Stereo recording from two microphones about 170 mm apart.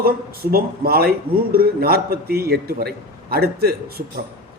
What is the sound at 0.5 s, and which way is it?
A man's voice, 65° right (ahead or behind).